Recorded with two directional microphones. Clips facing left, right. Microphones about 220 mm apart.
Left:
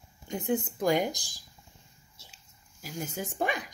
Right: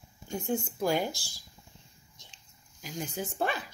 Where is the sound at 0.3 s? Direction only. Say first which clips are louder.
Left 2 dB; 20° left (ahead or behind).